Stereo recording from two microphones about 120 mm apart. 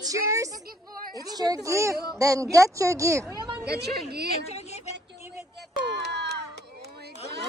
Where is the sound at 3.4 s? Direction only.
35° right (ahead or behind).